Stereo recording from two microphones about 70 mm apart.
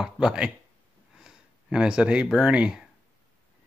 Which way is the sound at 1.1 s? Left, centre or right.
Centre.